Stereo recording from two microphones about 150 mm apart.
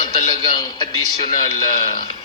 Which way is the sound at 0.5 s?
30° left (ahead or behind).